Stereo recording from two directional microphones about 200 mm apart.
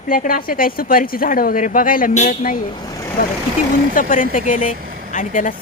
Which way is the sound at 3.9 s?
40° left (ahead or behind).